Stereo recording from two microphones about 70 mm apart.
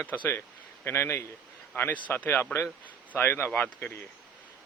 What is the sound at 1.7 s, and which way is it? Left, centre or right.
Speech, left.